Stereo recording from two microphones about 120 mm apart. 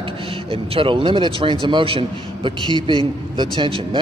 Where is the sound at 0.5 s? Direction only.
50° right (ahead or behind).